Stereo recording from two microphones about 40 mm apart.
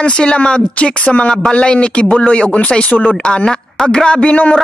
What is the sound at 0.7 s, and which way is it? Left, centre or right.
A man's voice, left.